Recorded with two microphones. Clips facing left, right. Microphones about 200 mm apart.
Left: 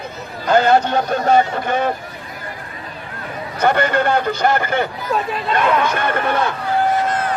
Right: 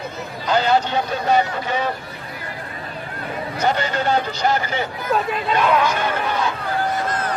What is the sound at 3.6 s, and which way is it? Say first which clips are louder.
A man's voice: left 5 dB; 55° left (ahead or behind).